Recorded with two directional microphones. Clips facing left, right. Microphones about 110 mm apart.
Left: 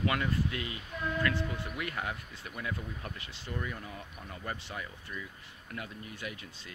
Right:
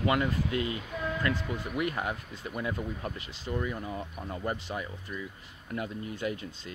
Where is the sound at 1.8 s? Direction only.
25° right (ahead or behind).